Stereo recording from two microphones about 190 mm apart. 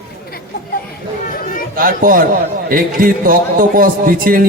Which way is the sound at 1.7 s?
50° right (ahead or behind).